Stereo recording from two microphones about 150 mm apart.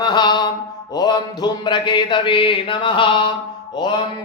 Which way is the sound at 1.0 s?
25° left (ahead or behind).